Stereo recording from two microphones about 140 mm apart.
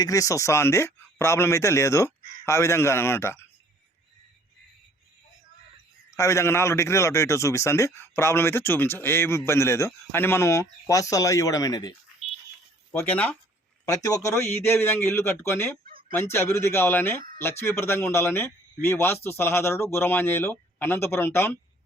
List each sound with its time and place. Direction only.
0.0 s a man's voice: 25° left (ahead or behind)
6.1 s a man's voice: 20° left (ahead or behind)
12.9 s speech: 10° left (ahead or behind)
13.8 s speech: 25° left (ahead or behind)
15.9 s fowl: 90° right
16.3 s speech: 15° left (ahead or behind)